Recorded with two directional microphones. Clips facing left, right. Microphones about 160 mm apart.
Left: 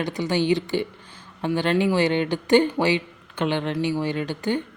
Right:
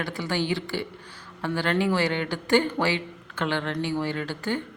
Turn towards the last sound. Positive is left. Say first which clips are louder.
# left 4 dB
turn(degrees=20)  # may be behind; listen again after turning